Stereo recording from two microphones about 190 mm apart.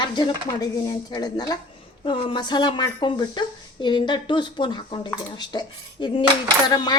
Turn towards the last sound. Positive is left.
turn(degrees=20)  # may be behind; listen again after turning